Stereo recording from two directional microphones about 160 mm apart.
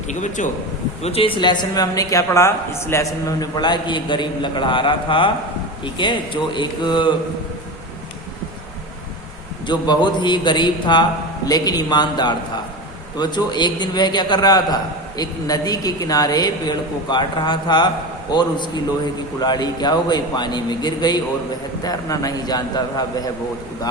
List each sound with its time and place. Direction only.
0.1 s a man's voice: 50° left (ahead or behind)
1.0 s speech: 35° left (ahead or behind)
9.6 s speech: 30° left (ahead or behind)